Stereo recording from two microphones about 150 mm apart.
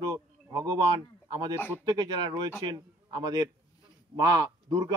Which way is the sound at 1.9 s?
30° right (ahead or behind).